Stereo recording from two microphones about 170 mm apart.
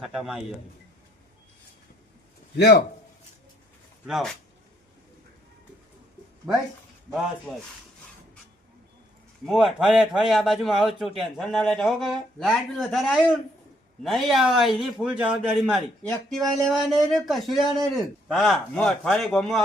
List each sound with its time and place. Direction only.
0.0 s speech: 5° right (ahead or behind)
2.6 s a man's voice: 65° left (ahead or behind)
4.0 s speech: centre (ahead or behind)
6.5 s speech: centre (ahead or behind)
9.5 s speech: centre (ahead or behind)